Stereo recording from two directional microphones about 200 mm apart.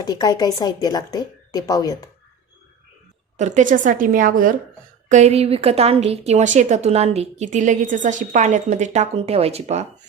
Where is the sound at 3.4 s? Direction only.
40° right (ahead or behind).